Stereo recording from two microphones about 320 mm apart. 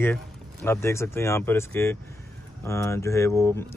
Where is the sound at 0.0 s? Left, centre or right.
Centre.